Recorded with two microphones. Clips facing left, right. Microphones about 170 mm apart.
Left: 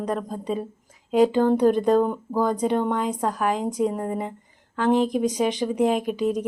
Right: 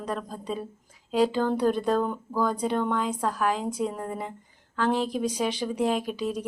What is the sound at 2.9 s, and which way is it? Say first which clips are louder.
A woman's voice: left 3 dB; 45° left (ahead or behind).